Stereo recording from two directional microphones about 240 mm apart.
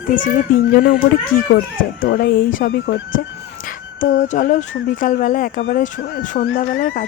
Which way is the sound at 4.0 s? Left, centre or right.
Left.